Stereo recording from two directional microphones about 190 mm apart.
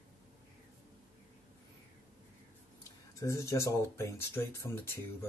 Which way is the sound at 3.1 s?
15° left (ahead or behind).